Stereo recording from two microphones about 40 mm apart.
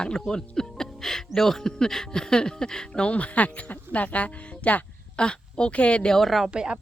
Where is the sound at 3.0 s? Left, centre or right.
Left.